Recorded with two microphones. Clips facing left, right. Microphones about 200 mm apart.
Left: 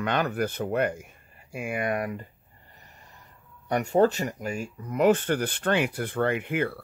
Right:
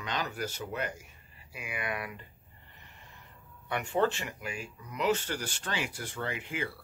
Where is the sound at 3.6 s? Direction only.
40° left (ahead or behind); by 6.8 s 55° left (ahead or behind).